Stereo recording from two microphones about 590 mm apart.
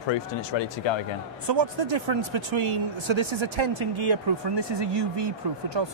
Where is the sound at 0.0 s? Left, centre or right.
Left.